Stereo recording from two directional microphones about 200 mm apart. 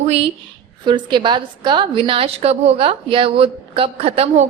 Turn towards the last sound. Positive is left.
turn(degrees=-30)  # may be behind; listen again after turning